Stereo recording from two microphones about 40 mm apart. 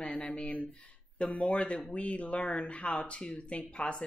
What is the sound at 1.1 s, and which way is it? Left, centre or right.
Speech, left.